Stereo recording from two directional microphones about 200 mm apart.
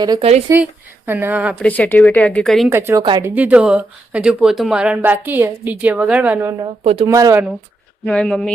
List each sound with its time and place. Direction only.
0.0 s a woman's voice: 20° right (ahead or behind)
1.5 s a woman's voice: 5° left (ahead or behind)
2.6 s a woman's voice: 15° right (ahead or behind)
3.2 s speech: 10° right (ahead or behind)
6.8 s a woman's voice: 30° right (ahead or behind)
7.1 s speech: 15° right (ahead or behind)
8.0 s speech: 5° left (ahead or behind)